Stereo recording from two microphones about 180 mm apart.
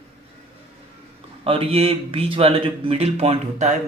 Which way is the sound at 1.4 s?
30° right (ahead or behind).